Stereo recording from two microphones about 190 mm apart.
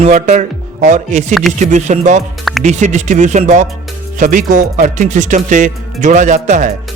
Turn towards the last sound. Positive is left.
turn(degrees=-40)  # may be behind; listen again after turning